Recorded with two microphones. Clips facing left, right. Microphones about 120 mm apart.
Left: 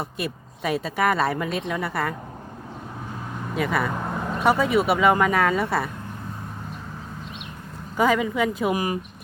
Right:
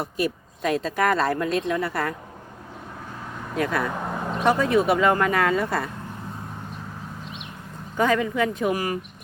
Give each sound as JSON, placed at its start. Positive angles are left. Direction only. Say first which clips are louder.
{"t": 0.0, "sound": "speech", "louder": "right 4 dB", "side_deg": 0}
{"t": 3.5, "sound": "speech", "louder": "even", "side_deg": 5}
{"t": 7.9, "sound": "speech", "louder": "left 1 dB", "side_deg": 5}
{"t": 8.7, "sound": "speech", "louder": "left 1 dB", "side_deg": 15}